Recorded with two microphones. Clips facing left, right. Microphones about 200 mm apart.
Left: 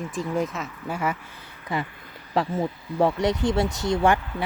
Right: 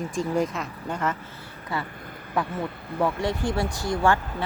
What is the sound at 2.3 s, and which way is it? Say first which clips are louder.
Speech: left 3 dB; 25° left (ahead or behind).